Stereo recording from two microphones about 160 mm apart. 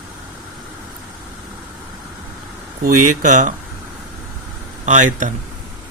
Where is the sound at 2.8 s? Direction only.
55° right (ahead or behind).